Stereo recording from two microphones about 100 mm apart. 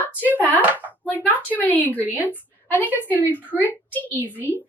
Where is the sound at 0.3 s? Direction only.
20° left (ahead or behind).